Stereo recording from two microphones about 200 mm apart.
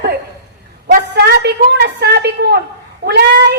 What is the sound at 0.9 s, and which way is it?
A woman's voice, 50° right (ahead or behind).